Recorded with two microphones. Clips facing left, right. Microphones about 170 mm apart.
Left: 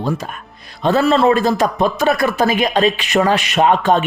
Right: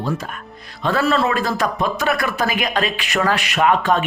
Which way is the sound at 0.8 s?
25° left (ahead or behind).